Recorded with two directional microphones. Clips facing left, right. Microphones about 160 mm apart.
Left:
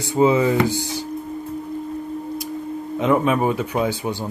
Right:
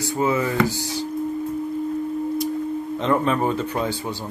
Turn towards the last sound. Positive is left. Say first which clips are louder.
# left 3 dB
turn(degrees=10)  # may be behind; listen again after turning